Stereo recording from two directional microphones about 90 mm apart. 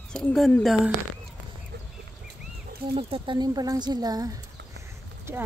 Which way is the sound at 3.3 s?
45° right (ahead or behind).